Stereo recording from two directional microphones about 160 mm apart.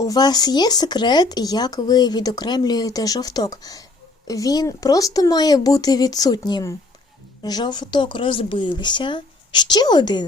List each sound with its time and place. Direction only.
0.0 s speech: 25° left (ahead or behind)